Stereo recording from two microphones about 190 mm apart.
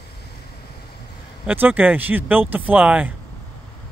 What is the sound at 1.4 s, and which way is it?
Speech, 10° right (ahead or behind).